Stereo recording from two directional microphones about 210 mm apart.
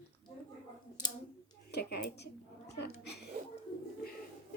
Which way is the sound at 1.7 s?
55° left (ahead or behind).